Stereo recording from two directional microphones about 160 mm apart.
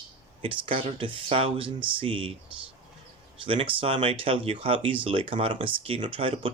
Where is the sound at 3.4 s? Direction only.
35° right (ahead or behind).